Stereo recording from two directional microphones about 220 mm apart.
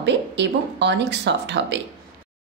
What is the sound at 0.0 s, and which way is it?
A woman's voice, 50° right (ahead or behind).